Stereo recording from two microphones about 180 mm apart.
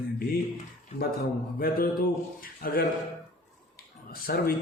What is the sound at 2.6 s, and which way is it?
Speech, 55° left (ahead or behind).